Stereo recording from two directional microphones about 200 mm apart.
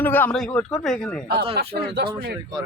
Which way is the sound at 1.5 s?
50° right (ahead or behind).